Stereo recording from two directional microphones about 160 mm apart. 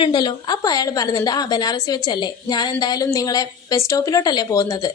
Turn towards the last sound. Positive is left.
turn(degrees=25)  # may be behind; listen again after turning